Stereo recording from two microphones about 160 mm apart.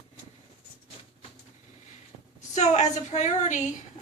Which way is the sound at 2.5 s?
45° left (ahead or behind).